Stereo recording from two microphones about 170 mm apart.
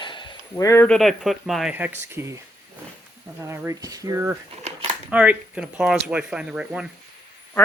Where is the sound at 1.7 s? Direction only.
10° right (ahead or behind).